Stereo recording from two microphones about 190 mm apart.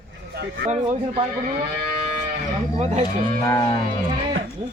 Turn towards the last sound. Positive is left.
turn(degrees=15)  # may be behind; listen again after turning